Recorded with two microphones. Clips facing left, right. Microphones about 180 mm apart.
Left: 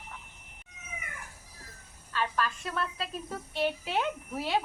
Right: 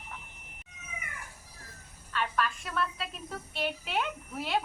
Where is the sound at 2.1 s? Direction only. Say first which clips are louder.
Even; 35° left (ahead or behind).